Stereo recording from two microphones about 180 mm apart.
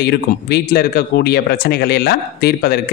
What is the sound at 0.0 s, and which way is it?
A man's voice, 65° left (ahead or behind).